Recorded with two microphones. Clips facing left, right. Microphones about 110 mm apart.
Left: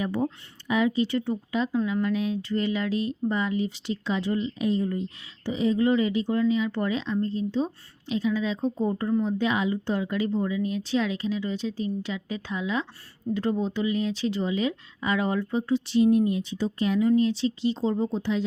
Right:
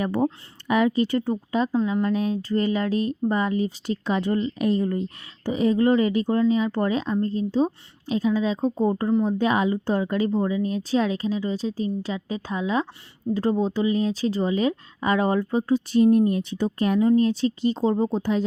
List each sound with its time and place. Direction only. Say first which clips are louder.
0.0 s speech: right 4 dB; 55° right (ahead or behind)
5.5 s speech: right 3 dB; 50° right (ahead or behind)